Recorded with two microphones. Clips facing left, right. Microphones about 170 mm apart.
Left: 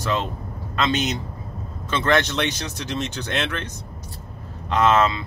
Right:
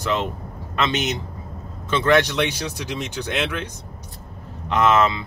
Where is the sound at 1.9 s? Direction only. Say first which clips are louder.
Right 3 dB; 10° right (ahead or behind).